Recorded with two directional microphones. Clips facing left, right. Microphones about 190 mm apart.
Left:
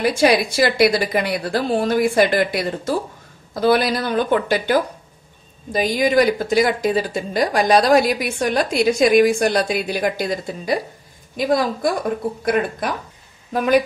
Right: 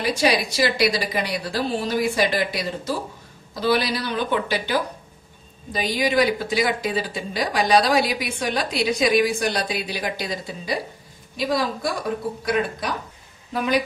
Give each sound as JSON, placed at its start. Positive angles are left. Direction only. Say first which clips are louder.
{"t": 0.0, "sound": "speech", "louder": "left 5 dB", "side_deg": 55}